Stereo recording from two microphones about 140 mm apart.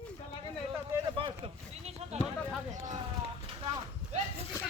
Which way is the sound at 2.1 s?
50° right (ahead or behind).